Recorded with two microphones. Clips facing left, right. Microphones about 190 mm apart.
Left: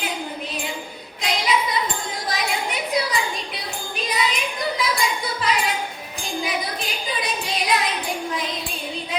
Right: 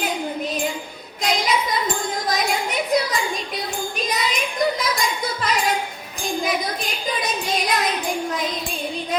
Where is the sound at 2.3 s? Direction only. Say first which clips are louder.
Right 2 dB; 45° right (ahead or behind).